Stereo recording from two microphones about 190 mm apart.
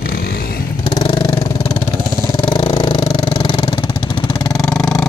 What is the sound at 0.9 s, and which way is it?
Vehicle, 25° left (ahead or behind).